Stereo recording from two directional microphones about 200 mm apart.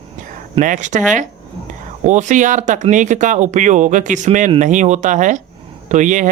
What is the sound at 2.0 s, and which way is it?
Speech, 40° right (ahead or behind).